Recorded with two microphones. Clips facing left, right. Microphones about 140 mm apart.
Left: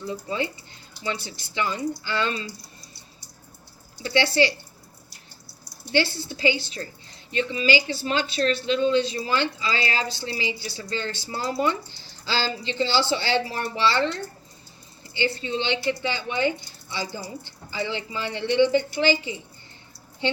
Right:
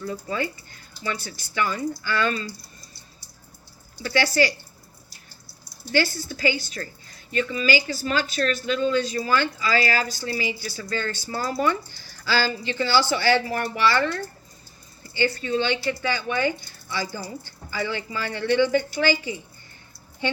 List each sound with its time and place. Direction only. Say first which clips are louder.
0.0 s speech: even; 25° left (ahead or behind)
4.0 s speech: even; 25° left (ahead or behind)
5.9 s speech: even; 25° left (ahead or behind)